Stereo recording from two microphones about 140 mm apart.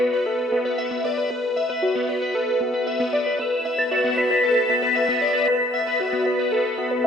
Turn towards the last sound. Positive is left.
turn(degrees=0)  # may be behind; listen again after turning